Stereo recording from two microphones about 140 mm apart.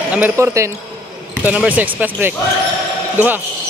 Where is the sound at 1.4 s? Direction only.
10° right (ahead or behind).